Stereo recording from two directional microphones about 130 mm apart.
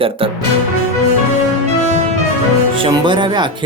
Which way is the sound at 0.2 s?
45° right (ahead or behind).